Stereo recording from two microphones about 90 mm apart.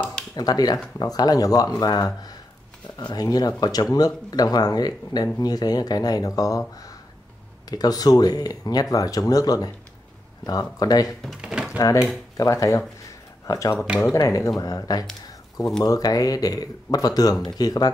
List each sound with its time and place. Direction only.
0.4 s speech: 45° left (ahead or behind)
7.7 s speech: 45° left (ahead or behind)
11.1 s speech: 5° right (ahead or behind)
11.8 s speech: 35° left (ahead or behind)